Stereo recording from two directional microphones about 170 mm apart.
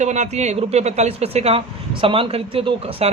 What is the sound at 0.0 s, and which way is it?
Speech, 40° right (ahead or behind).